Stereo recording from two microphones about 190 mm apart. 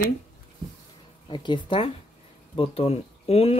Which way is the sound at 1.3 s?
25° left (ahead or behind).